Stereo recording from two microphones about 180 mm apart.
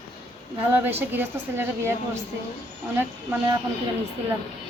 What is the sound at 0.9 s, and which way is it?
A woman's voice, 10° right (ahead or behind).